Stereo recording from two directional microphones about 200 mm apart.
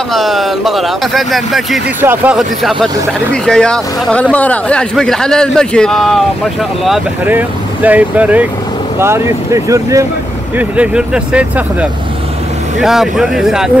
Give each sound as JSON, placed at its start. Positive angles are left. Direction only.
{"t": 0.1, "sound": "speech", "side_deg": 0}